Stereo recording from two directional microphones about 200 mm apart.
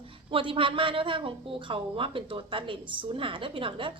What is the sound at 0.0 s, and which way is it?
A woman's voice, 25° right (ahead or behind).